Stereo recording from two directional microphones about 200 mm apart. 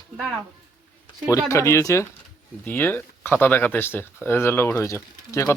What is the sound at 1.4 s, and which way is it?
Speech, 15° left (ahead or behind).